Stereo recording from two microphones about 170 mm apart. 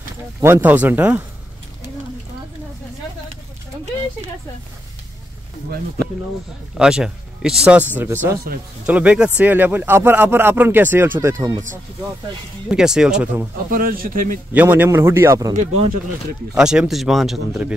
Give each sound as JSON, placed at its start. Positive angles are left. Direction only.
{"t": 0.4, "sound": "speech", "side_deg": -10}
{"t": 6.8, "sound": "speech", "side_deg": -5}
{"t": 12.6, "sound": "speech", "side_deg": -5}
{"t": 13.7, "sound": "speech", "side_deg": -60}
{"t": 14.5, "sound": "speech", "side_deg": -10}
{"t": 16.5, "sound": "speech", "side_deg": -5}